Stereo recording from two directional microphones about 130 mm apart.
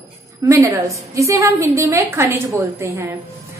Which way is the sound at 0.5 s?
25° right (ahead or behind).